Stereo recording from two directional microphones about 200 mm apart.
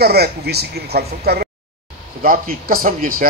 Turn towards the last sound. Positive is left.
turn(degrees=-45)  # may be behind; listen again after turning